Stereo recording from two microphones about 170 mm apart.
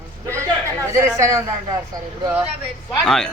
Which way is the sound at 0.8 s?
15° right (ahead or behind).